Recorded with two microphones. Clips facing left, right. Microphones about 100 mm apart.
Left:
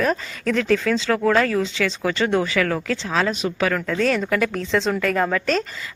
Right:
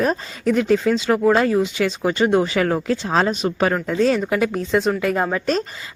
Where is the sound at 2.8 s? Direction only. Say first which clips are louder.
Right 4 dB; 20° right (ahead or behind).